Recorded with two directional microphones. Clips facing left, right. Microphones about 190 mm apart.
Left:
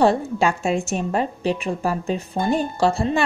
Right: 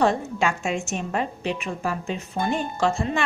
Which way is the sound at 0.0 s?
35° left (ahead or behind).